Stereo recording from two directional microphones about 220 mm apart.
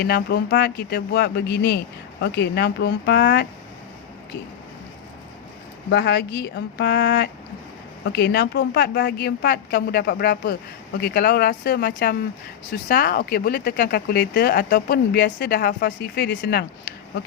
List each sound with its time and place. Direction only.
0.0 s speech: 45° left (ahead or behind)
5.9 s speech: 50° left (ahead or behind)